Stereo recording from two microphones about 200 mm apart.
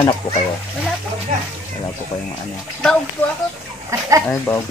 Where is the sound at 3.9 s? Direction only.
15° right (ahead or behind).